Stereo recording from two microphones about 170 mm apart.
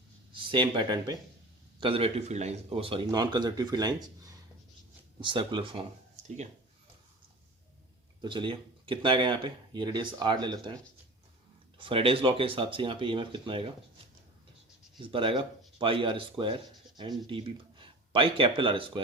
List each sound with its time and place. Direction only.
0.3 s speech: 30° right (ahead or behind)
8.2 s speech: 30° right (ahead or behind)
11.8 s speech: 30° right (ahead or behind)
14.9 s speech: 30° right (ahead or behind)